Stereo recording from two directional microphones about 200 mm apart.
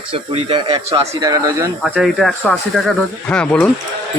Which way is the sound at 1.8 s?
Centre (ahead or behind).